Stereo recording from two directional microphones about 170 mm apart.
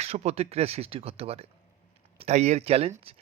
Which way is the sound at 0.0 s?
40° right (ahead or behind).